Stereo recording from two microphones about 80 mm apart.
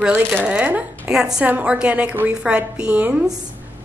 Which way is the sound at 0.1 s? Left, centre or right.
Right.